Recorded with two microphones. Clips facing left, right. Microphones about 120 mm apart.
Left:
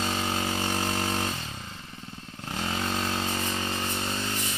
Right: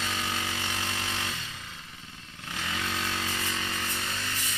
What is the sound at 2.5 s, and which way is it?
Motorcycle, 35° left (ahead or behind).